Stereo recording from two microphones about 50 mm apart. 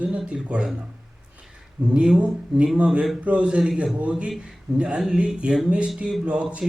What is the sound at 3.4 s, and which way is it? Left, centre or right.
Speech, centre.